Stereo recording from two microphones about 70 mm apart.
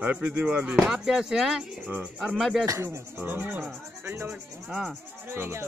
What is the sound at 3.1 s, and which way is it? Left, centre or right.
Speech, right.